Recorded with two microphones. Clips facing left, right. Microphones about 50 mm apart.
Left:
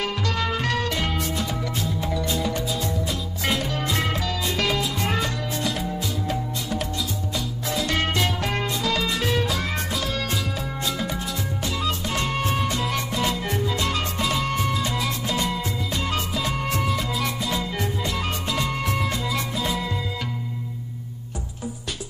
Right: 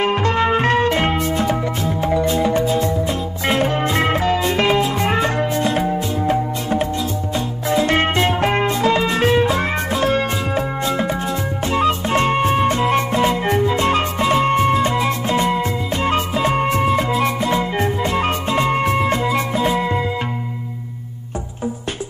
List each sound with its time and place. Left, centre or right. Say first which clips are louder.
0.0 s music: right 9 dB; right